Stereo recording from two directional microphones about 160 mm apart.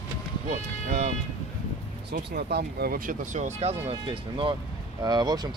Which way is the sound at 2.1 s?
75° right (ahead or behind).